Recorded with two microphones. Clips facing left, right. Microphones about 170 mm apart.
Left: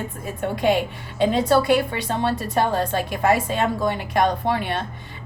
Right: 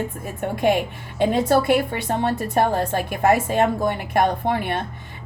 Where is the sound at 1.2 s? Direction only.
55° right (ahead or behind).